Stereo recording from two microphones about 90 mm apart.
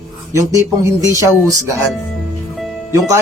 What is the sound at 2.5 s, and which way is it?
Music, centre (ahead or behind).